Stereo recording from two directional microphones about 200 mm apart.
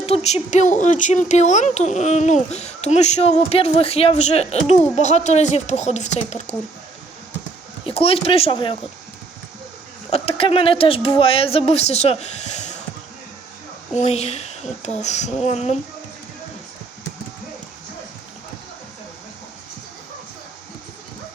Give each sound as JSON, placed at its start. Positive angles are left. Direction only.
{"t": 0.0, "sound": "speech", "side_deg": 30}
{"t": 7.9, "sound": "speech", "side_deg": 30}
{"t": 10.1, "sound": "speech", "side_deg": 30}
{"t": 13.9, "sound": "speech", "side_deg": 35}